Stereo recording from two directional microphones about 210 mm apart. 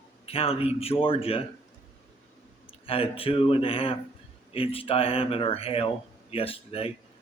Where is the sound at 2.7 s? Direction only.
25° left (ahead or behind).